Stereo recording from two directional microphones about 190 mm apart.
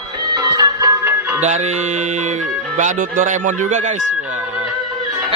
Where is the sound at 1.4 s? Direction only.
35° right (ahead or behind).